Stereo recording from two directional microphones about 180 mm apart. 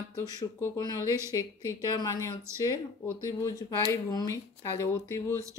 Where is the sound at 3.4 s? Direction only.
20° left (ahead or behind).